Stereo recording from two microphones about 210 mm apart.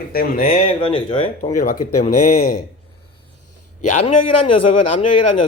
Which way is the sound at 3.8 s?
35° left (ahead or behind).